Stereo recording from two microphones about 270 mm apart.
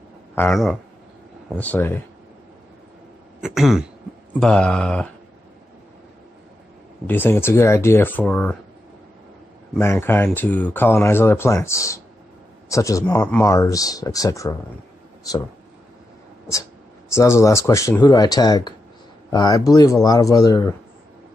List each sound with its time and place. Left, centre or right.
0.4 s mantra: centre
3.3 s mantra: centre
7.1 s speech: centre
9.8 s speech: centre
17.2 s speech: centre